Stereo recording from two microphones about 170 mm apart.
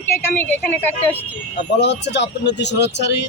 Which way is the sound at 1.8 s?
90° left.